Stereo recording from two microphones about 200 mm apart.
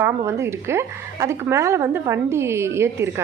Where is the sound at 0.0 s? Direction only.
15° right (ahead or behind).